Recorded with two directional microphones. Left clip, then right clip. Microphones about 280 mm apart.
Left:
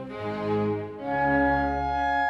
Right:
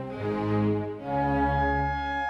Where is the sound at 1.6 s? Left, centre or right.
Centre.